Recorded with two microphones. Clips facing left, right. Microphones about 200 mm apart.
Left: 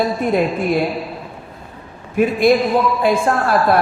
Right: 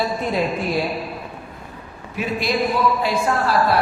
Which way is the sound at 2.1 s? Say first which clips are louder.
Left 9 dB; 50° left (ahead or behind).